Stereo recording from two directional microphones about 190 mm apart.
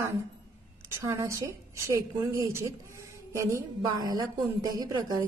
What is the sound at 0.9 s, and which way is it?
A woman's voice, 15° right (ahead or behind).